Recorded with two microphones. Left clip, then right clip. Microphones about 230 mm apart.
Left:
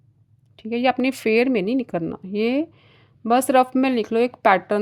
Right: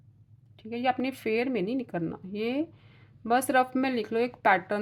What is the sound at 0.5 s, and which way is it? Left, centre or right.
A woman's voice, left.